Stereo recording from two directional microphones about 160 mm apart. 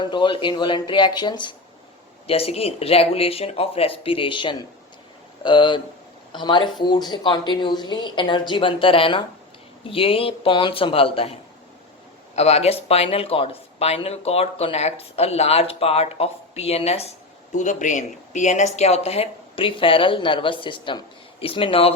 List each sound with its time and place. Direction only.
0.0 s speech: 30° left (ahead or behind)
12.4 s speech: 40° left (ahead or behind)
17.5 s speech: 50° left (ahead or behind)